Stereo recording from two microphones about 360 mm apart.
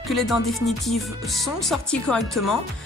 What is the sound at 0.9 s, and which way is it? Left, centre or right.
Speech, centre.